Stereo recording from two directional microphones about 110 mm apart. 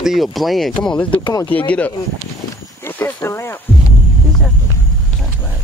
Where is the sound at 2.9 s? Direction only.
20° left (ahead or behind).